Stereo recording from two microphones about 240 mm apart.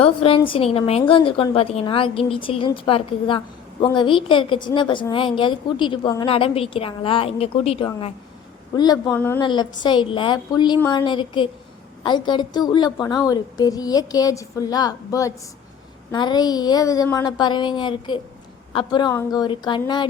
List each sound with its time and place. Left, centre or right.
0.0 s a woman's voice: left
9.5 s a woman's voice: centre